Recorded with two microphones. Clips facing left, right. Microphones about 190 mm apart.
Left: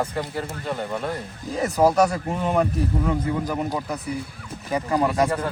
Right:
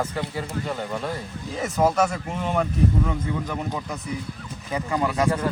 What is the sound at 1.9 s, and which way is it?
Speech, 35° left (ahead or behind).